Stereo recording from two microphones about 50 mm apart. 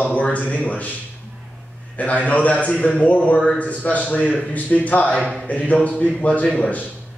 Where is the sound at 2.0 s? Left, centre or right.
Left.